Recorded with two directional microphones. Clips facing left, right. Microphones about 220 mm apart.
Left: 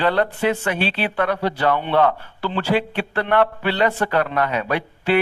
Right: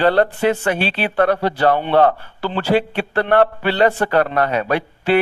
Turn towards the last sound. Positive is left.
turn(degrees=-40)  # may be behind; listen again after turning